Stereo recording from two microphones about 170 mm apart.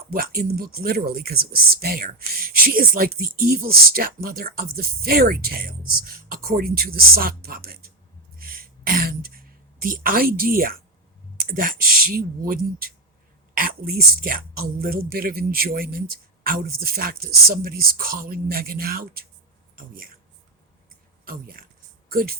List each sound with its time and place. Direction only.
0.1 s speech: 60° right (ahead or behind)
8.4 s throat clearing: 60° right (ahead or behind)
11.4 s speech: 55° right (ahead or behind)
21.2 s speech: 60° right (ahead or behind)